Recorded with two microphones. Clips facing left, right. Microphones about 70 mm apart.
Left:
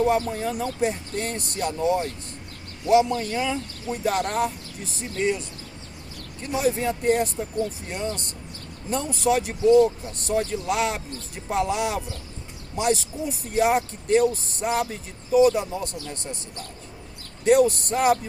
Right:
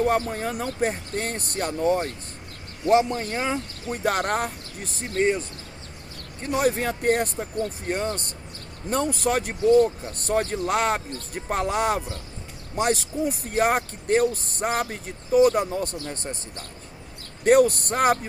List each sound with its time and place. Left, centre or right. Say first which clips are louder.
0.1 s speech: left 1 dB; right
4.0 s speech: even; right
6.4 s speech: right 1 dB; right
17.4 s speech: right 1 dB; right